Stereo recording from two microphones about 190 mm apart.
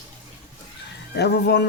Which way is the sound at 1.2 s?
60° left (ahead or behind).